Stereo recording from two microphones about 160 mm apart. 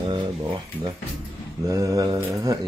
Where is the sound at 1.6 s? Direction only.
20° right (ahead or behind).